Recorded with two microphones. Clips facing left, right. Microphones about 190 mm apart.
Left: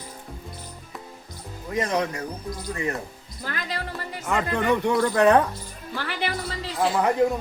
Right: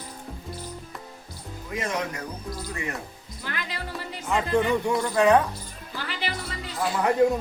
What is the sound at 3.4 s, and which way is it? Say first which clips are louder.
Music: left 3 dB; 40° left (ahead or behind).